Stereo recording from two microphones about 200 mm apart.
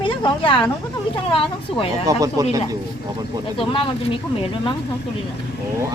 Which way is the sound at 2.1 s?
15° right (ahead or behind).